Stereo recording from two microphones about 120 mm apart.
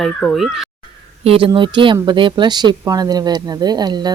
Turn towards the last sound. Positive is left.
turn(degrees=-35)  # may be behind; listen again after turning